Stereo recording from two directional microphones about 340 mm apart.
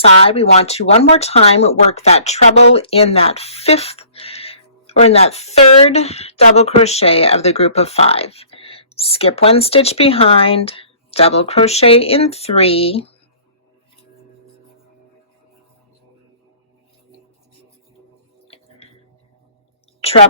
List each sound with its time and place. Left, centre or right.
0.3 s speech: centre
18.4 s music: centre
20.0 s whispering: centre